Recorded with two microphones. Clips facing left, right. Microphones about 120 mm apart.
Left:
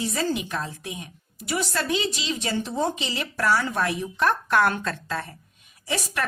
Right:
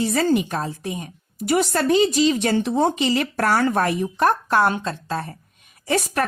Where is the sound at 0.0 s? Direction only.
60° right (ahead or behind); by 5.3 s 35° right (ahead or behind).